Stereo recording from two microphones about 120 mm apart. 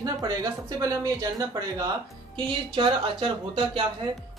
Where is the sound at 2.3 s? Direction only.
40° right (ahead or behind).